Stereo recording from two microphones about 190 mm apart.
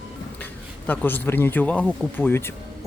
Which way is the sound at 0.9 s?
10° left (ahead or behind).